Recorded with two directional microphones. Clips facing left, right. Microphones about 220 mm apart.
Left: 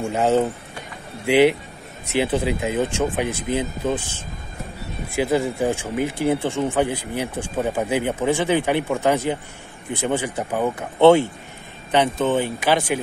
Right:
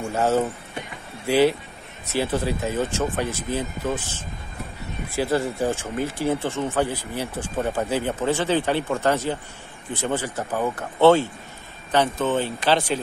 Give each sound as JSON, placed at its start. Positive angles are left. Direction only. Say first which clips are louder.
{"t": 0.0, "sound": "speech", "louder": "left 3 dB", "side_deg": 15}
{"t": 5.1, "sound": "speech", "louder": "left 3 dB", "side_deg": 15}